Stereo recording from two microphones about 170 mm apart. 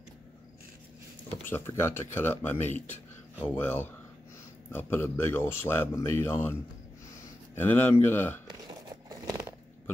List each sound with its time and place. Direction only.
1.5 s a man's voice: 15° left (ahead or behind)
9.1 s biting: 20° right (ahead or behind)